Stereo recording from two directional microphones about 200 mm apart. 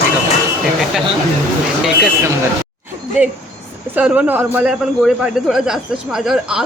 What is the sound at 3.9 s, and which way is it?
A man's voice, 5° right (ahead or behind).